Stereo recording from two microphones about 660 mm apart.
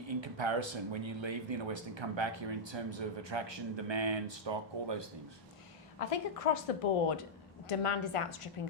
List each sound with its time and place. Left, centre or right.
0.1 s speech: right
6.1 s a woman's voice: left